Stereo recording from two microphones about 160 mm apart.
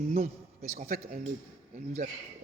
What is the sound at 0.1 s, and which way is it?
Speech, 45° right (ahead or behind).